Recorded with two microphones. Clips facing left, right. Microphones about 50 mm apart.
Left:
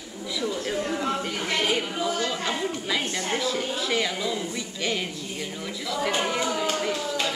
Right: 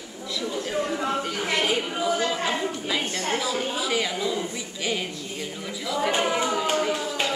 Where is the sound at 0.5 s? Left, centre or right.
Centre.